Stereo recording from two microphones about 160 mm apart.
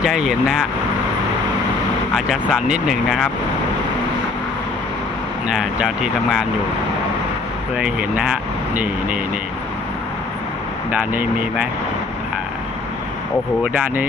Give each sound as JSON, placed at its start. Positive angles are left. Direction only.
{"t": 0.0, "sound": "speech", "side_deg": -5}
{"t": 2.1, "sound": "speech", "side_deg": 0}
{"t": 5.5, "sound": "speech", "side_deg": -5}
{"t": 7.8, "sound": "speech", "side_deg": -5}
{"t": 11.1, "sound": "speech", "side_deg": -10}